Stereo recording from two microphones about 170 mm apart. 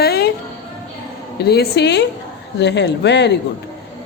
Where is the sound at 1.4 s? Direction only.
70° left (ahead or behind); by 3.3 s 90° left.